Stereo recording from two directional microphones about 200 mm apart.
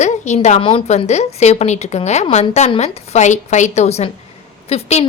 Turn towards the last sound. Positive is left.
turn(degrees=30)  # may be behind; listen again after turning